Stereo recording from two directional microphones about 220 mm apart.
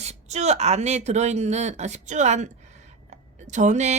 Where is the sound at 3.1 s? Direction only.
30° right (ahead or behind).